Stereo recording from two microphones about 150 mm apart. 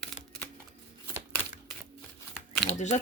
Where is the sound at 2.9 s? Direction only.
50° left (ahead or behind).